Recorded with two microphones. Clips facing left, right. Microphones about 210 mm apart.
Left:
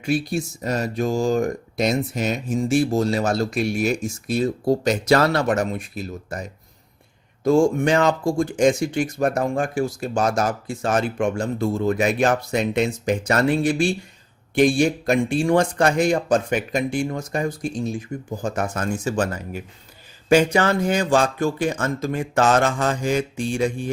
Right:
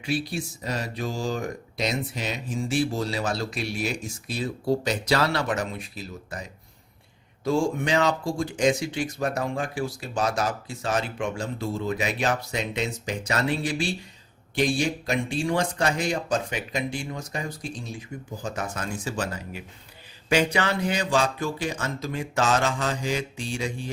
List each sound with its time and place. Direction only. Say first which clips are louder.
0.0 s speech: left 6 dB; 45° left (ahead or behind)